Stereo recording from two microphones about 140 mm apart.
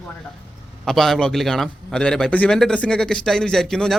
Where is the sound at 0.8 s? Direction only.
Centre (ahead or behind).